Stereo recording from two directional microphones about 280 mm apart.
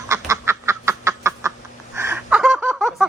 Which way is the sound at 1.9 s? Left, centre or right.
Centre.